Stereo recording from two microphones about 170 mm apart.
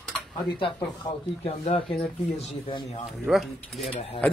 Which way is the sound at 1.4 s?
35° left (ahead or behind).